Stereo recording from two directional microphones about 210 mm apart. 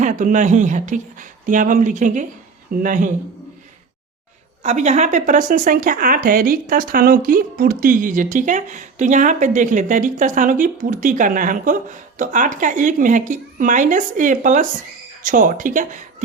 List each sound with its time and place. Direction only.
0.0 s speech: 35° right (ahead or behind)
4.6 s speech: 35° right (ahead or behind)